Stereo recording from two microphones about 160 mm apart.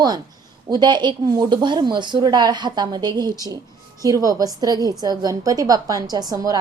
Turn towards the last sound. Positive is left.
turn(degrees=-25)  # may be behind; listen again after turning